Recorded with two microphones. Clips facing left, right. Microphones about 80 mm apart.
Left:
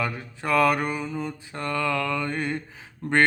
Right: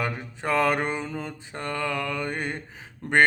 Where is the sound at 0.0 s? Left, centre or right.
Right.